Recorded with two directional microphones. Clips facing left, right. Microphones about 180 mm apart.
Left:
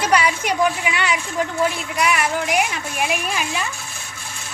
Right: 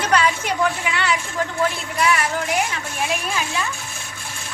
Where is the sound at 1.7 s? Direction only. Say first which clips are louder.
Even; 15° left (ahead or behind).